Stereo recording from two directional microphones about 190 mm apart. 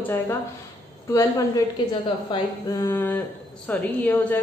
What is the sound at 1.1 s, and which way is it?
A woman's voice, 15° left (ahead or behind).